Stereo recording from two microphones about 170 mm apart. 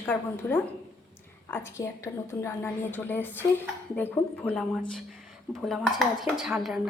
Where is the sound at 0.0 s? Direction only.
10° left (ahead or behind).